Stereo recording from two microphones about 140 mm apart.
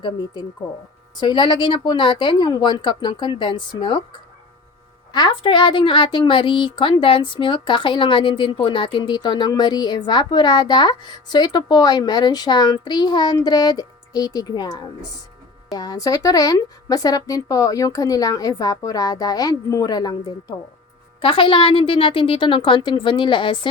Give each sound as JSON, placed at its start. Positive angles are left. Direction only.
{"t": 0.0, "sound": "a woman's voice", "side_deg": 30}
{"t": 5.1, "sound": "a woman's voice", "side_deg": 35}
{"t": 21.2, "sound": "a woman's voice", "side_deg": 40}